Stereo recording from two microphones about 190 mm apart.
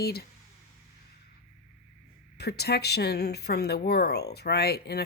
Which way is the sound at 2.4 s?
60° left (ahead or behind).